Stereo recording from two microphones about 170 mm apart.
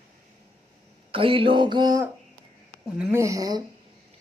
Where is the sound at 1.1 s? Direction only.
30° right (ahead or behind).